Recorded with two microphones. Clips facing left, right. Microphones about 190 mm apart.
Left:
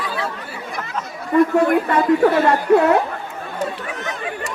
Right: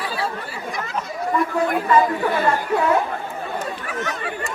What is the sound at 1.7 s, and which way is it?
Speech, 60° left (ahead or behind).